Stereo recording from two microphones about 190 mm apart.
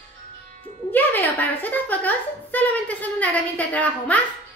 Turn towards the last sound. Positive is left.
turn(degrees=10)  # may be behind; listen again after turning